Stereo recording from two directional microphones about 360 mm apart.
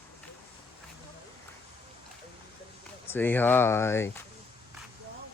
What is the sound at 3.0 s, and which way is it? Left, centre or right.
Speech, centre.